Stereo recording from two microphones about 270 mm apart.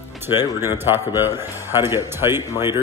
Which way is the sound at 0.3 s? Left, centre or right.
Centre.